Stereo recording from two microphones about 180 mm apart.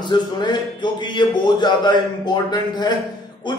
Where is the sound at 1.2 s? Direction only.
25° left (ahead or behind).